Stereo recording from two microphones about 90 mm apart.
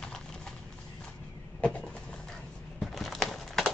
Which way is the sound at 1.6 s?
15° left (ahead or behind).